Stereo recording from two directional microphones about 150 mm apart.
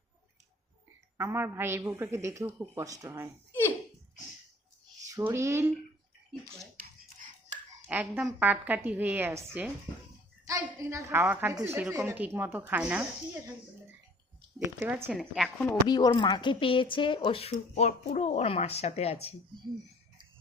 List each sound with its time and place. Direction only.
1.2 s a woman's voice: 15° right (ahead or behind)
5.0 s speech: 20° right (ahead or behind)
6.4 s dishes: 65° right (ahead or behind)
7.9 s a woman's voice: 10° right (ahead or behind)
15.1 s a woman's voice: centre (ahead or behind)
15.9 s speech: 30° left (ahead or behind)